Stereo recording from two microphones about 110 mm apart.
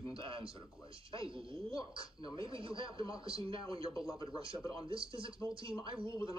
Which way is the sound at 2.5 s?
55° right (ahead or behind).